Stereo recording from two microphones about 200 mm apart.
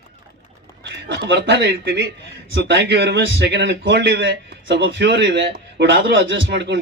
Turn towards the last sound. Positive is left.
turn(degrees=-60)  # may be behind; listen again after turning